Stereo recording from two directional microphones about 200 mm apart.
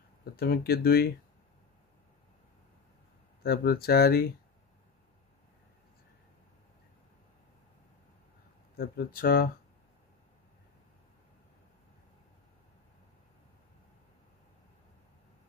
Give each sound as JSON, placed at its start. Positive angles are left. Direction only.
{"t": 0.2, "sound": "speech", "side_deg": 50}
{"t": 3.4, "sound": "speech", "side_deg": 50}
{"t": 8.7, "sound": "speech", "side_deg": 50}